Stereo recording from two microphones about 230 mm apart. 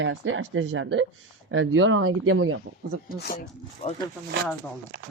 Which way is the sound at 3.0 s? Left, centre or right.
Left.